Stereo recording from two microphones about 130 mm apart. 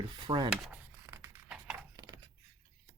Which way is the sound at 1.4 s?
10° right (ahead or behind).